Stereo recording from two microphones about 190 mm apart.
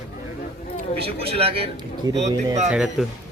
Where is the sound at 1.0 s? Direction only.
30° right (ahead or behind).